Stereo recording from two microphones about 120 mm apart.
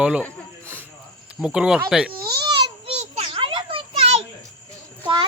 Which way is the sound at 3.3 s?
45° right (ahead or behind).